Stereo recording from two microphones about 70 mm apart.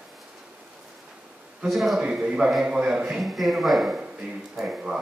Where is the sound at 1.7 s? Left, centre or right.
Centre.